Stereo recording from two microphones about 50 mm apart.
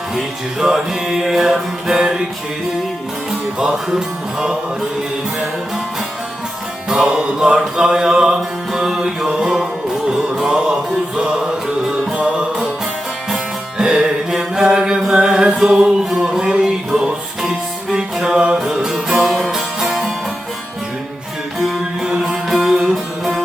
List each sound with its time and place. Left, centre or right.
0.6 s music: centre
3.6 s music: centre
6.9 s music: centre
11.9 s music: centre
13.7 s music: centre
22.2 s music: centre